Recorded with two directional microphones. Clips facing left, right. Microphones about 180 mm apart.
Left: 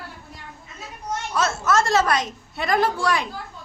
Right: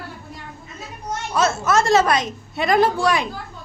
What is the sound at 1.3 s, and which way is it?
A woman's voice, 15° right (ahead or behind).